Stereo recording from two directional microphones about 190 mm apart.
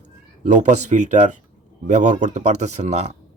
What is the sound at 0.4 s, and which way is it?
Speech, 40° right (ahead or behind).